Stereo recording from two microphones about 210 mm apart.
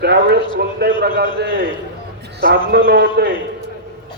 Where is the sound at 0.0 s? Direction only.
50° right (ahead or behind).